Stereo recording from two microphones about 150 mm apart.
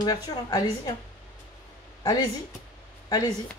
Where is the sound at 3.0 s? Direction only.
25° left (ahead or behind).